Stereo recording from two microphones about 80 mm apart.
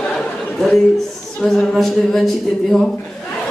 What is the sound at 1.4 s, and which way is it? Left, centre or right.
Speech, centre.